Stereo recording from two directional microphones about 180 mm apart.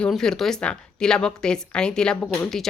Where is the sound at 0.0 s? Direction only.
5° left (ahead or behind).